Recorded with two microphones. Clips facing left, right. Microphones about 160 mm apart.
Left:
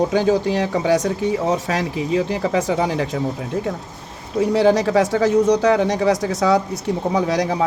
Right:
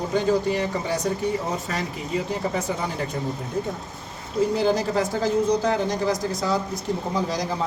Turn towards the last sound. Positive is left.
turn(degrees=70)  # may be behind; listen again after turning